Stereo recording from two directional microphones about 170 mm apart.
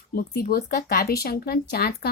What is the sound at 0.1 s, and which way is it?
Speech, 60° left (ahead or behind).